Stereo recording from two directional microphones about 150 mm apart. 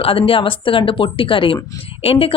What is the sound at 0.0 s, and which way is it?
A woman's voice, 35° left (ahead or behind).